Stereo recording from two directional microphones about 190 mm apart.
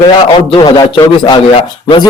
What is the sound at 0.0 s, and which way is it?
A man's voice, 25° left (ahead or behind).